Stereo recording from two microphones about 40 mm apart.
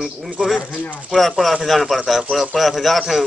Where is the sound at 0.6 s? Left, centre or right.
Left.